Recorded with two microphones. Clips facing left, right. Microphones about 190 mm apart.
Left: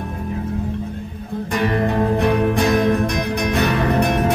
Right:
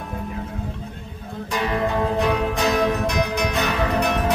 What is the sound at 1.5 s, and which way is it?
Music, 55° left (ahead or behind).